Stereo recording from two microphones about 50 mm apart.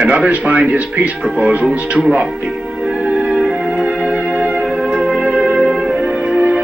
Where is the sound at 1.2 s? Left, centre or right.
Right.